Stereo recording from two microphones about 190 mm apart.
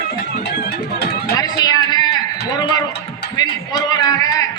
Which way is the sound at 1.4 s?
20° left (ahead or behind).